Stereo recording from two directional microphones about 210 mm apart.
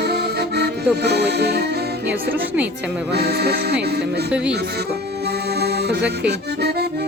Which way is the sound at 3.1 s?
50° right (ahead or behind).